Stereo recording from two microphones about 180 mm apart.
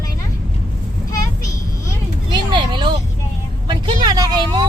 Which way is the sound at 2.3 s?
25° right (ahead or behind).